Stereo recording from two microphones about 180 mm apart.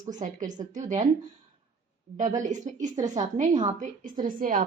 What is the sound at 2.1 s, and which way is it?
A woman's voice, 45° right (ahead or behind).